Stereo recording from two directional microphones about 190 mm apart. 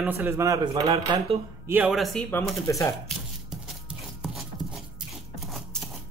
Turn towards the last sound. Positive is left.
turn(degrees=0)  # may be behind; listen again after turning